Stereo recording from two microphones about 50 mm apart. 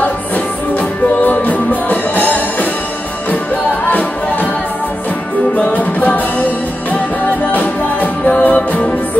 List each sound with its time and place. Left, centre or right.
0.7 s music: left
3.8 s music: left
5.6 s music: left
7.5 s music: left